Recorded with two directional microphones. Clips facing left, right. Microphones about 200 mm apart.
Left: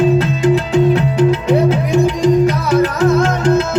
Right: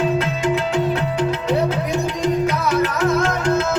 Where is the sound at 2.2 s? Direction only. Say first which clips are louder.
Left 6 dB; 30° left (ahead or behind).